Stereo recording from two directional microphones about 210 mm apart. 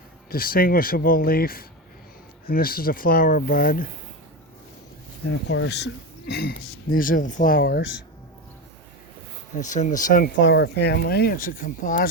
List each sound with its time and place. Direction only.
0.3 s speech: 45° left (ahead or behind)
5.5 s speech: 55° left (ahead or behind)
9.6 s speech: 35° left (ahead or behind)
10.4 s speech: 55° left (ahead or behind); by 12.0 s 40° left (ahead or behind)